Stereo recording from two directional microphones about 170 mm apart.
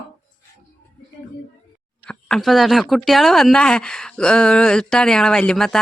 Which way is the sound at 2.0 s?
5° left (ahead or behind).